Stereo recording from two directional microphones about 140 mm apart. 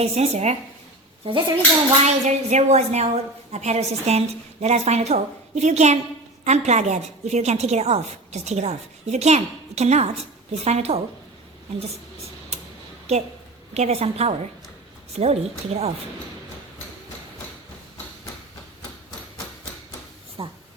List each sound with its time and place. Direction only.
0.0 s a woman's voice: 50° right (ahead or behind)
1.2 s speech: 35° right (ahead or behind)
2.2 s a woman's voice: 55° right (ahead or behind)
12.5 s a sound: 50° right (ahead or behind)
13.1 s a woman's voice: 50° right (ahead or behind)
20.4 s speech: 40° right (ahead or behind)